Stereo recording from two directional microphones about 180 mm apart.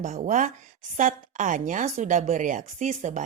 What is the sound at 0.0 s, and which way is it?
A woman's voice, 45° right (ahead or behind).